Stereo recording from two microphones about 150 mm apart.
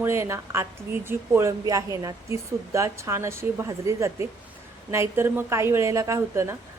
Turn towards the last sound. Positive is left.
turn(degrees=-20)  # may be behind; listen again after turning